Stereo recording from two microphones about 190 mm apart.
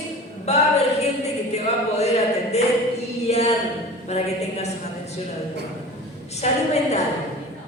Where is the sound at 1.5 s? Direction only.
35° left (ahead or behind).